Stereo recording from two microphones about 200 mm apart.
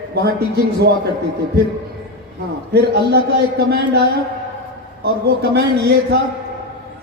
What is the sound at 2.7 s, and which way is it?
Speech, 55° right (ahead or behind).